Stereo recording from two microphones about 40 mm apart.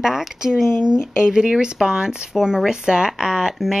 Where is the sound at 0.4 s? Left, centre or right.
Centre.